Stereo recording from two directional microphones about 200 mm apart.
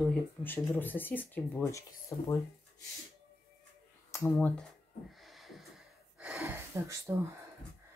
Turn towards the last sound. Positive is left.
turn(degrees=-15)  # may be behind; listen again after turning